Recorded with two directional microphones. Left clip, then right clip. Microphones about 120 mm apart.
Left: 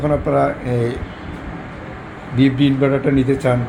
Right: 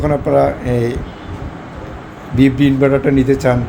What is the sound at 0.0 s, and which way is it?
Speech, 35° right (ahead or behind).